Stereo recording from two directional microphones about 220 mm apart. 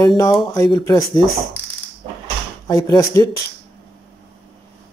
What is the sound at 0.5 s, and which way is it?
Speech, 15° left (ahead or behind).